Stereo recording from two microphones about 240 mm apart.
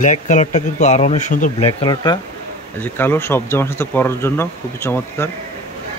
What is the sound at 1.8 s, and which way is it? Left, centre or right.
Speech, centre.